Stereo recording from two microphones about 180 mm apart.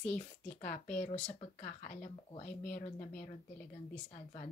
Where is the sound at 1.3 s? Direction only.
40° left (ahead or behind).